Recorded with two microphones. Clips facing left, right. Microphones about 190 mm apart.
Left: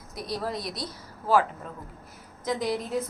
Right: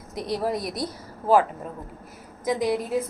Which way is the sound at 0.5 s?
50° right (ahead or behind).